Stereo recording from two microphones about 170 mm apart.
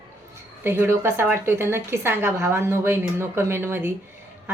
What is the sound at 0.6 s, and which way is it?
A woman's voice, 15° right (ahead or behind).